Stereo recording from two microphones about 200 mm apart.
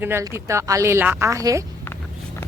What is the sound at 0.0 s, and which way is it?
A woman's voice, 10° right (ahead or behind).